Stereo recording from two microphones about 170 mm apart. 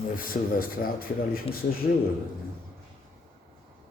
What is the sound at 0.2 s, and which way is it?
A man's voice, 55° left (ahead or behind).